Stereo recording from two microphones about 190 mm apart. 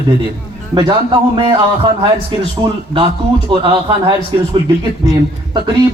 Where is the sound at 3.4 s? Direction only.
25° right (ahead or behind).